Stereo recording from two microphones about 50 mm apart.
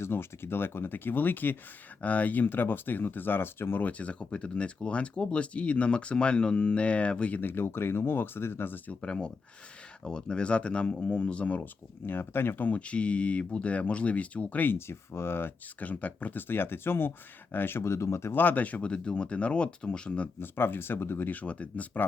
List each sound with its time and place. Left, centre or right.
0.0 s speech: left
3.8 s speech: left
7.3 s speech: left
8.9 s speech: left
12.0 s speech: left
12.8 s speech: left
14.8 s speech: left
15.8 s speech: left
17.8 s speech: left
18.3 s speech: left
20.4 s speech: left
21.2 s speech: left